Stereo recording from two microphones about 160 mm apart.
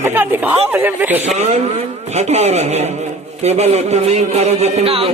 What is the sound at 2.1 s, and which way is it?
A man's voice, 45° right (ahead or behind).